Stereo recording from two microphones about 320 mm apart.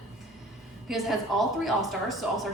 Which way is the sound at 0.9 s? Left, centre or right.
Centre.